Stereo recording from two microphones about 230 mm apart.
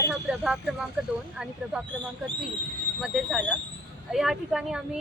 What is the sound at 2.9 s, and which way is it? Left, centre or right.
Speech, centre.